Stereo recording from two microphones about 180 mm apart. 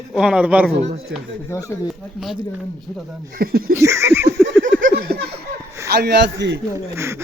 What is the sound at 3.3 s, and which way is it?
Speech, 55° right (ahead or behind).